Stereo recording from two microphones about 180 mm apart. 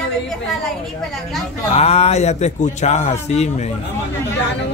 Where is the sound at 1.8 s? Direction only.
35° left (ahead or behind).